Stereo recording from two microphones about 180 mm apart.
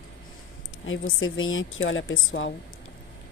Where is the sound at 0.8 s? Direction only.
90° left.